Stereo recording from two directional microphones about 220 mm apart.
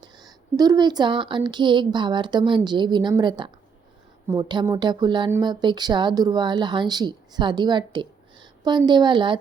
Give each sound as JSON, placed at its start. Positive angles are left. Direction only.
{"t": 0.0, "sound": "a woman's voice", "side_deg": -15}